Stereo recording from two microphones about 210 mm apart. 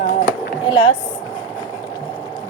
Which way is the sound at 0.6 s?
25° left (ahead or behind).